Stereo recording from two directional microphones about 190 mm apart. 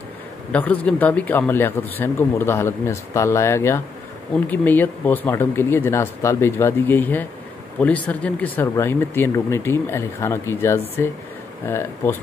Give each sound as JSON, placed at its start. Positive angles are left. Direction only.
{"t": 0.5, "sound": "speech", "side_deg": 5}